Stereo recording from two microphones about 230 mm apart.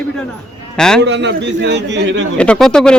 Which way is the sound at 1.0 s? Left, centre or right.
Right.